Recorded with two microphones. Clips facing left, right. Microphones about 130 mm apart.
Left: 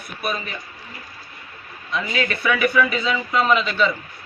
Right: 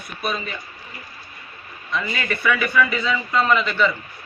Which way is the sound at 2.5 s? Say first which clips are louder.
Even; 10° left (ahead or behind).